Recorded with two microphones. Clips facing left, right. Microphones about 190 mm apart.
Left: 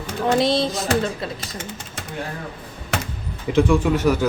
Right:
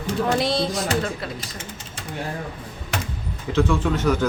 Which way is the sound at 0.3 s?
20° left (ahead or behind).